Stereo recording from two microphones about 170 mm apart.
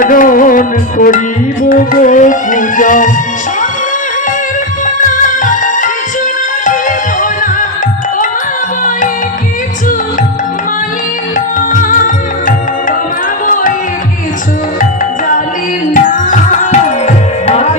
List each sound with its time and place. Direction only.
0.0 s music: 55° left (ahead or behind)
4.9 s music: 50° left (ahead or behind)
11.3 s music: 50° left (ahead or behind)
16.0 s tabla: 50° left (ahead or behind)